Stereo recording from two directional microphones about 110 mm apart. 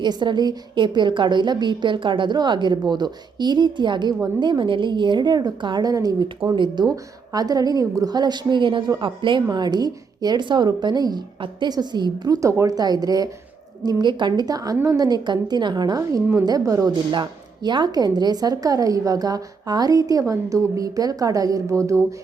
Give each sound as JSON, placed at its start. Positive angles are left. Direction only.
{"t": 0.0, "sound": "a woman's voice", "side_deg": -45}
{"t": 17.1, "sound": "a woman's voice", "side_deg": -45}